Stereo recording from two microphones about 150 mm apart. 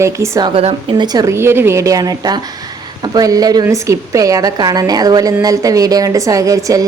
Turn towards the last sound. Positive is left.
turn(degrees=-20)  # may be behind; listen again after turning